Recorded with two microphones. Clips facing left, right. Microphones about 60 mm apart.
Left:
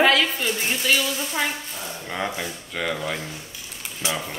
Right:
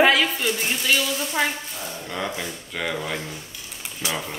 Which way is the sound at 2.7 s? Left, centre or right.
Centre.